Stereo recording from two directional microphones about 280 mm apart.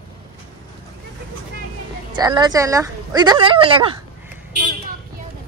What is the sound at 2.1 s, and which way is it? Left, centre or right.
Speech, centre.